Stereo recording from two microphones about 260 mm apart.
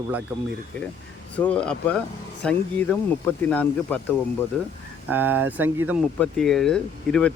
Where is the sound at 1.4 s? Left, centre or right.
Centre.